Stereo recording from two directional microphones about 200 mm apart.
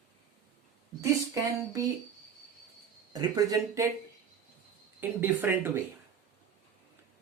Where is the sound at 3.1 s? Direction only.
20° right (ahead or behind).